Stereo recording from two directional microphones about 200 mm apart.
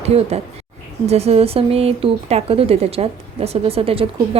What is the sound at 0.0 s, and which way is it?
Speech, 30° right (ahead or behind).